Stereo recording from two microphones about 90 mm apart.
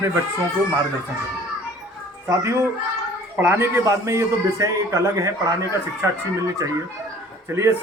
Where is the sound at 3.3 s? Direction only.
25° right (ahead or behind).